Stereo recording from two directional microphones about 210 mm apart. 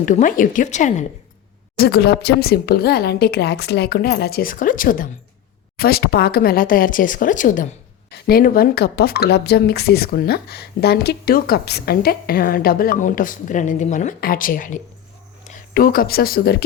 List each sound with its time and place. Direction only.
0.0 s speech: 35° left (ahead or behind)
1.8 s speech: 50° left (ahead or behind)